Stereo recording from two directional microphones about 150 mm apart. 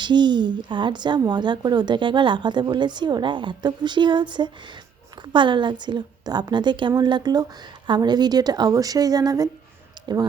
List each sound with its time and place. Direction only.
0.0 s speech: 30° right (ahead or behind)